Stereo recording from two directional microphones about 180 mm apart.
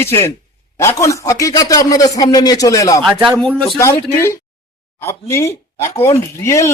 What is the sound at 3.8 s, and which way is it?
Speech, 15° left (ahead or behind).